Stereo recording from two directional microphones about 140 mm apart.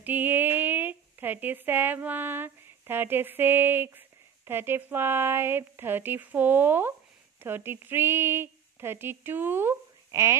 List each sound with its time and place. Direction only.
0.0 s speech: 15° right (ahead or behind)